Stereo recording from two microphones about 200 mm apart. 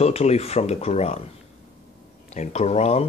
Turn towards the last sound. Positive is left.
turn(degrees=30)  # may be behind; listen again after turning